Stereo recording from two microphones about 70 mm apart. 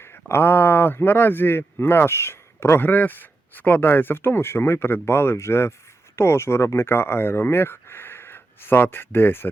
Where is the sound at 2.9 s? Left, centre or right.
Left.